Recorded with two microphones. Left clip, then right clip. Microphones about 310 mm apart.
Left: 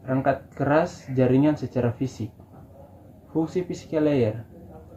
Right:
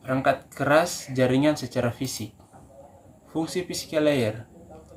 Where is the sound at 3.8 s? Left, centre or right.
Right.